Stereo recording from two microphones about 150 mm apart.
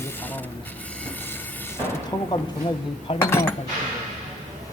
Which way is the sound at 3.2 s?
15° left (ahead or behind).